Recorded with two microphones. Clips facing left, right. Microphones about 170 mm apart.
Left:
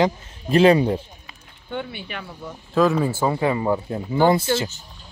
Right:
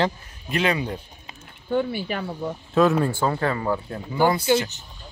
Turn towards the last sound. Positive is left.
turn(degrees=-15)  # may be behind; listen again after turning